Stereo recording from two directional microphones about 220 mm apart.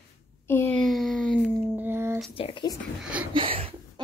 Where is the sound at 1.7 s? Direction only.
10° right (ahead or behind).